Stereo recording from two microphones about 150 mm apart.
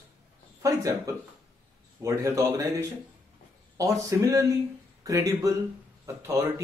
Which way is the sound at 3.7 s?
20° right (ahead or behind).